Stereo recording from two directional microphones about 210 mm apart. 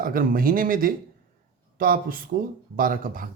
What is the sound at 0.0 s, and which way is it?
Speech, 45° right (ahead or behind).